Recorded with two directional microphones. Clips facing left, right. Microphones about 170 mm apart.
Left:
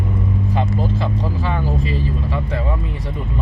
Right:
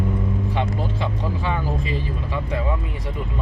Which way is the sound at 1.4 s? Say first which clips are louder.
Left 3 dB; 35° left (ahead or behind).